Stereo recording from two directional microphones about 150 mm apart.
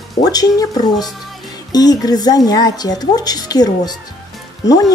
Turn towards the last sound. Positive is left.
turn(degrees=25)  # may be behind; listen again after turning